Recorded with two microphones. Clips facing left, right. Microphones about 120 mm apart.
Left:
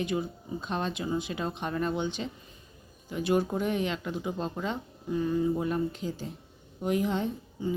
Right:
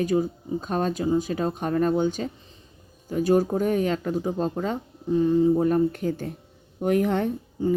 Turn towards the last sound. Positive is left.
turn(degrees=-55)  # may be behind; listen again after turning